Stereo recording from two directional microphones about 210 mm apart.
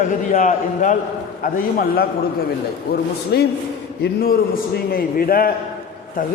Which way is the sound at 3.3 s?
50° left (ahead or behind).